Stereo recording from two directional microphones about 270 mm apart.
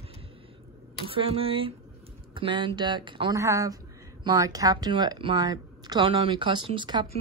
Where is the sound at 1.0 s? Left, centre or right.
Centre.